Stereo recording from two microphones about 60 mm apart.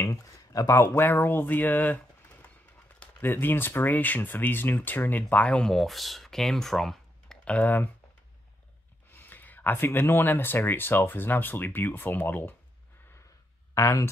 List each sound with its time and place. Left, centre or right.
0.0 s a sound: left
0.7 s speech: left
5.5 s speech: centre
7.4 s speech: left
9.1 s speech: left
13.7 s speech: left